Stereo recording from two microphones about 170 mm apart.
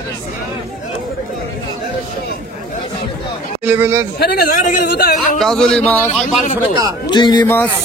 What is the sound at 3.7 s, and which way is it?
Speech, 10° right (ahead or behind).